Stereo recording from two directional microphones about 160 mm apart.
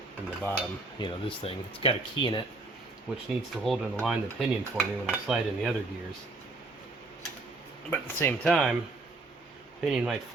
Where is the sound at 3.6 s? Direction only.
Centre (ahead or behind).